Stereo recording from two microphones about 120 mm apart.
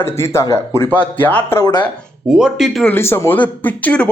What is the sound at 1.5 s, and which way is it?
Speech, 35° left (ahead or behind).